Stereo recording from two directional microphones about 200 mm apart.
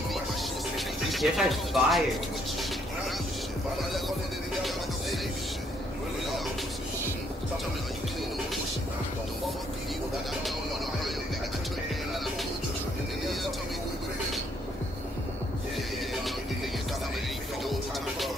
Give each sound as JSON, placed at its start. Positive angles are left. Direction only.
{"t": 0.7, "sound": "speech", "side_deg": 0}